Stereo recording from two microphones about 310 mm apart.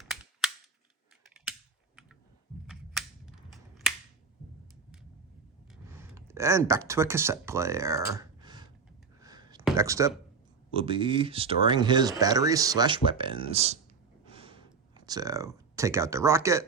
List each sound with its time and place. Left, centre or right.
0.0 s cap gun: centre
2.6 s cap gun: centre
5.9 s speech: centre
9.2 s a sound: centre
9.6 s speech: centre
14.3 s a sound: centre